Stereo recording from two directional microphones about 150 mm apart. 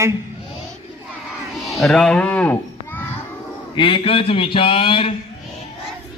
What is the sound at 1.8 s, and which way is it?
Speech, centre (ahead or behind).